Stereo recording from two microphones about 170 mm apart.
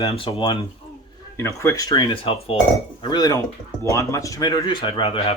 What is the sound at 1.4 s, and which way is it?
Speech, 15° left (ahead or behind).